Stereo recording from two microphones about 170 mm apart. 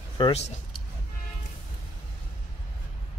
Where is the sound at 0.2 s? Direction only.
30° left (ahead or behind).